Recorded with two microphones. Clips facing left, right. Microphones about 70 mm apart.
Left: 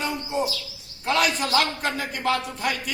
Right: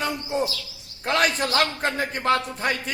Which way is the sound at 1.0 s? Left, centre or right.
Right.